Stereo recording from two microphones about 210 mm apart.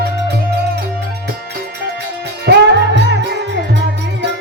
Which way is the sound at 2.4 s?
55° right (ahead or behind).